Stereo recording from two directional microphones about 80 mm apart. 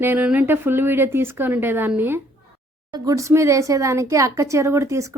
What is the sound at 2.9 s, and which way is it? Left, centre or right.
Speech, right.